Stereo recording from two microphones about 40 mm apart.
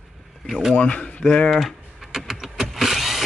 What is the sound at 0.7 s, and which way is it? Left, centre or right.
Speech, left.